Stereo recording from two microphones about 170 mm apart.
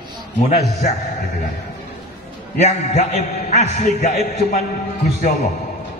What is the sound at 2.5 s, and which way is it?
A man's voice, 40° left (ahead or behind).